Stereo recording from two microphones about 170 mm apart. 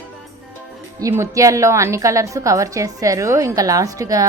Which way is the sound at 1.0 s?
20° right (ahead or behind).